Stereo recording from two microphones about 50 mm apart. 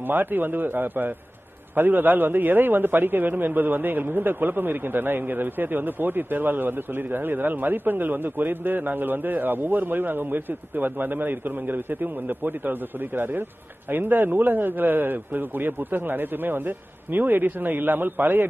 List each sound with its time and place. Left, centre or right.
0.0 s a man's voice: right